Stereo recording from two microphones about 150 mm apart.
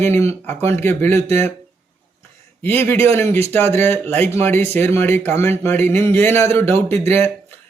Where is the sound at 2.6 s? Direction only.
15° left (ahead or behind).